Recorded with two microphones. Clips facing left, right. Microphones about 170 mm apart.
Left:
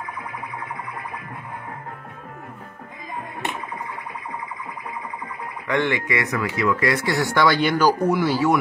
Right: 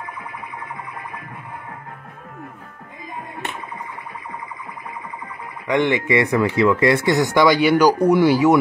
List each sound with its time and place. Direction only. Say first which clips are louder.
5.7 s speech: right 4 dB; 20° right (ahead or behind)